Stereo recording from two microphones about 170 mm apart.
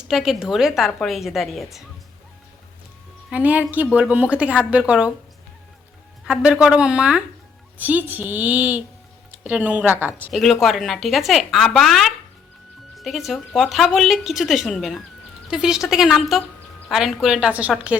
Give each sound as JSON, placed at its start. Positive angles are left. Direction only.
{"t": 0.1, "sound": "a woman's voice", "side_deg": -5}
{"t": 3.2, "sound": "speech", "side_deg": -10}
{"t": 6.2, "sound": "a woman's voice", "side_deg": -5}
{"t": 10.3, "sound": "a woman's voice", "side_deg": 0}